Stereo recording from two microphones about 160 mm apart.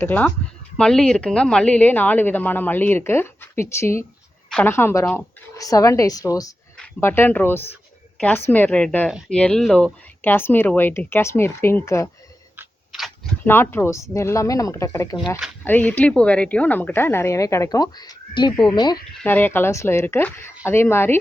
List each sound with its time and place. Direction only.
0.0 s a woman's voice: 10° left (ahead or behind)
13.4 s a woman's voice: 15° left (ahead or behind)
19.2 s speech: 10° left (ahead or behind)